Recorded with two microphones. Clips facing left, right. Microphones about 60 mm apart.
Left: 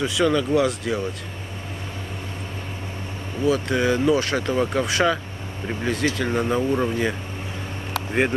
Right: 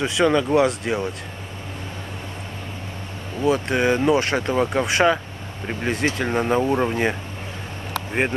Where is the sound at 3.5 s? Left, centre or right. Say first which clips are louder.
Right 2 dB; right.